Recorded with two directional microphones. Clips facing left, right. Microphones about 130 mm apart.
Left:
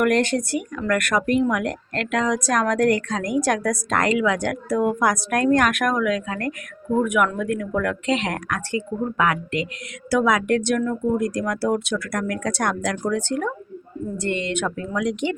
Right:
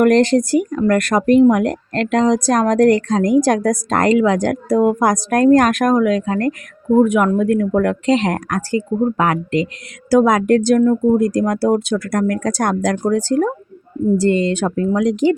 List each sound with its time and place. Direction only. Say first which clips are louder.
0.0 s a woman's voice: right 7 dB; 35° right (ahead or behind)